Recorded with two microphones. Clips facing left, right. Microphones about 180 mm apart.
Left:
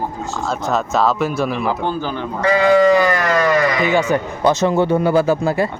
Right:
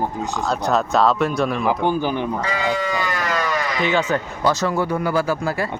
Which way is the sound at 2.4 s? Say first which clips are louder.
Left 10 dB; 60° left (ahead or behind).